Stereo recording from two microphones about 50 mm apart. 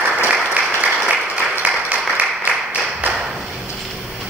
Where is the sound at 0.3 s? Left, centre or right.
Right.